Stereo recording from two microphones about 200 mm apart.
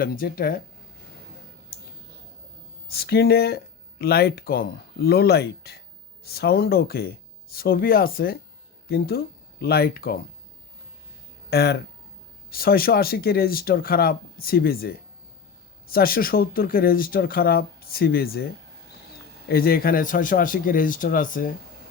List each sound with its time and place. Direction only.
0.0 s speech: 45° left (ahead or behind)
2.9 s speech: 50° left (ahead or behind)
11.5 s speech: 55° left (ahead or behind)
19.5 s speech: 50° left (ahead or behind)